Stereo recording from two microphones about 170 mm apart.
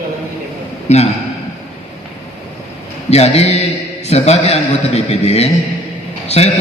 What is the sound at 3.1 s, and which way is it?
A man's voice, 40° left (ahead or behind).